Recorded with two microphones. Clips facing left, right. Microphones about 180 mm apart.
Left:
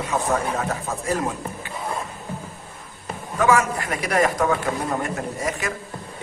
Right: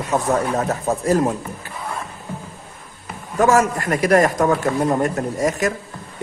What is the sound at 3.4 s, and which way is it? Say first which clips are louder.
A man's voice: right 4 dB; 45° right (ahead or behind).